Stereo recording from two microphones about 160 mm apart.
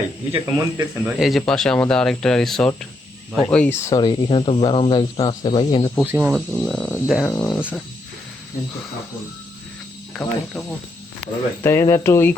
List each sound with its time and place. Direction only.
0.4 s speech: 20° right (ahead or behind)
1.2 s speech: centre (ahead or behind); by 5.9 s 30° left (ahead or behind)
6.1 s speech: 10° right (ahead or behind)
6.5 s speech: 5° left (ahead or behind)
7.6 s speech: 10° right (ahead or behind)
10.2 s speech: 10° left (ahead or behind)